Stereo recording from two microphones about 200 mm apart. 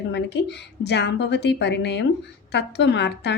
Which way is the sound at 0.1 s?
60° left (ahead or behind).